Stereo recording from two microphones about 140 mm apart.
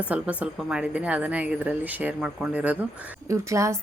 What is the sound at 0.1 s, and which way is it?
Speech, 10° right (ahead or behind).